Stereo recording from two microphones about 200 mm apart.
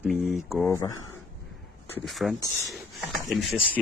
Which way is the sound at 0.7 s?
15° left (ahead or behind).